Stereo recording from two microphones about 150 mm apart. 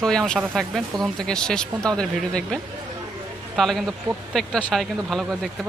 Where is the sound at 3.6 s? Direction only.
Centre (ahead or behind).